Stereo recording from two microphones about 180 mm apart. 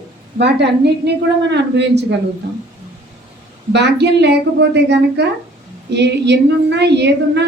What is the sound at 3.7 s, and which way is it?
A woman's voice, 70° right (ahead or behind).